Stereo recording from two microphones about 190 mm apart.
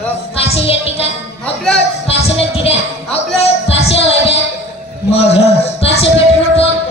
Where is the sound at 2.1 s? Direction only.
30° left (ahead or behind).